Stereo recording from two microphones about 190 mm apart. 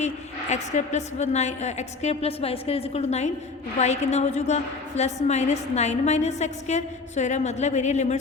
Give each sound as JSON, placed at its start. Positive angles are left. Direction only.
{"t": 0.5, "sound": "a woman's voice", "side_deg": 35}